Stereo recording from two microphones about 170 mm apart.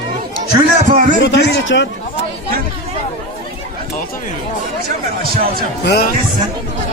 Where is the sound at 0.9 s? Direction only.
45° right (ahead or behind).